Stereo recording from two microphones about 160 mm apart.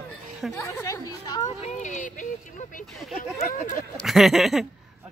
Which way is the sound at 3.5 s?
55° left (ahead or behind).